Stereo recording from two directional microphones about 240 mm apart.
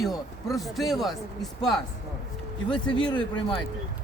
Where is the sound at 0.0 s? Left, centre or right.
Centre.